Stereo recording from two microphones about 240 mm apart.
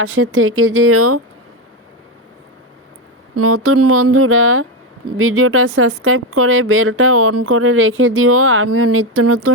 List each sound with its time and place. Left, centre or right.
0.0 s speech: right
3.3 s speech: right